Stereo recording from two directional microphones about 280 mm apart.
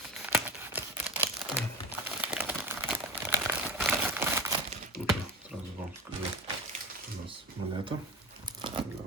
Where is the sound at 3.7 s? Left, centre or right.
Centre.